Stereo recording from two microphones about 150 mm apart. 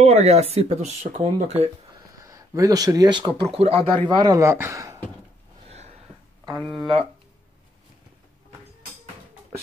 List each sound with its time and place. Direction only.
0.0 s speech: 45° right (ahead or behind)
2.0 s speech: 20° right (ahead or behind); by 3.8 s 40° right (ahead or behind)
4.1 s speech: 25° right (ahead or behind)
6.6 s speech: centre (ahead or behind)